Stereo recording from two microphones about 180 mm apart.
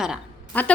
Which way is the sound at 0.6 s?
10° left (ahead or behind).